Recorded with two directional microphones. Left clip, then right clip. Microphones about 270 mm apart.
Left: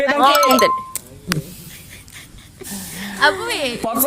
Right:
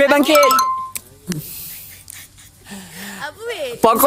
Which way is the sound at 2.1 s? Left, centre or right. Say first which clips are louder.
Left 1 dB; centre.